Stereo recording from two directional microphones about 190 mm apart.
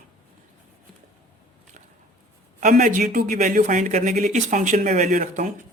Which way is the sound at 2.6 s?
40° right (ahead or behind).